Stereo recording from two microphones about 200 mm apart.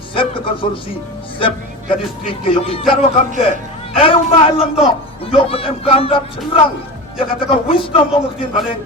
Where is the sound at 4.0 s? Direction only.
25° left (ahead or behind).